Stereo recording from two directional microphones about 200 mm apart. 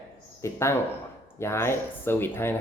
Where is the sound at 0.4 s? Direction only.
15° left (ahead or behind).